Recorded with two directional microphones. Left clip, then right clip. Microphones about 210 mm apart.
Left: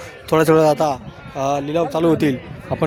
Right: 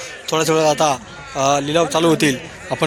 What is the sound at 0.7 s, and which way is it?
Speech, 15° left (ahead or behind).